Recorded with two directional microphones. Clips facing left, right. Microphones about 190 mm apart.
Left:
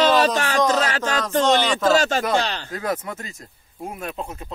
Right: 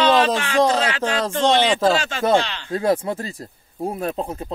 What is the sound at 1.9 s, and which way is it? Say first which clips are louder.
Speech: even; 40° left (ahead or behind).